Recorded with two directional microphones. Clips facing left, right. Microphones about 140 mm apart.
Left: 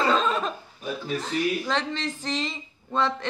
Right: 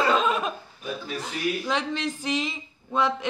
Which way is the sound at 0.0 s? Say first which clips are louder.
Even; 10° right (ahead or behind).